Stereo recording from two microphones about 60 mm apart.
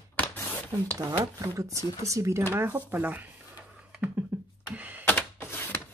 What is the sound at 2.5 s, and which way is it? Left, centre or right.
Speech, right.